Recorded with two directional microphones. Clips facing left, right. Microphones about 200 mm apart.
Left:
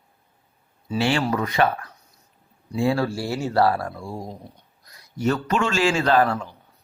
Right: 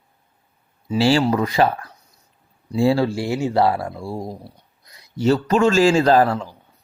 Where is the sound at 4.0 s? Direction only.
30° right (ahead or behind).